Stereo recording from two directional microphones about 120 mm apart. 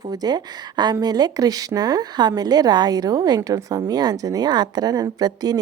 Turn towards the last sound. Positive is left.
turn(degrees=-35)  # may be behind; listen again after turning